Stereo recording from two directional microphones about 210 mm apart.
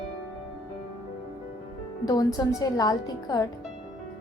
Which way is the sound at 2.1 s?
15° left (ahead or behind).